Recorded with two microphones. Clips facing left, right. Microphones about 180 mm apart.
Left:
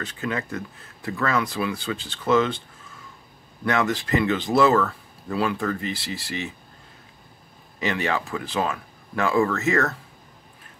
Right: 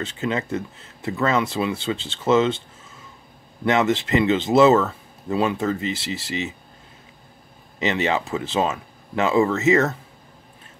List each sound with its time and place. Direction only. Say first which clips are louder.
0.0 s speech: right 3 dB; 25° right (ahead or behind)
7.8 s speech: right 3 dB; 20° right (ahead or behind)